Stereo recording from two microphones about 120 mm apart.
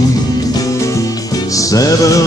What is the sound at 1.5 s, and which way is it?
Music, 30° left (ahead or behind).